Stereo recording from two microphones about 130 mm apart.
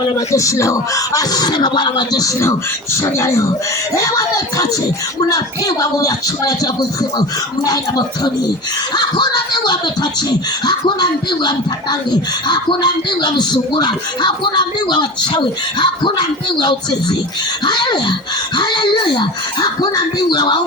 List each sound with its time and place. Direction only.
0.3 s speech: 25° left (ahead or behind)